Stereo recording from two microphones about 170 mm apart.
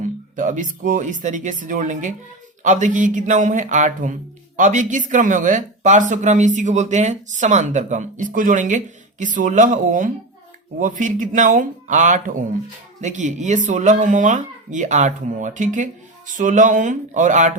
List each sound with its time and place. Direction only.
0.0 s a man's voice: 50° right (ahead or behind)